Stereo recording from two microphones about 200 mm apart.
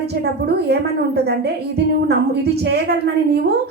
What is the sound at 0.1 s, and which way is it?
A woman's voice, 55° right (ahead or behind).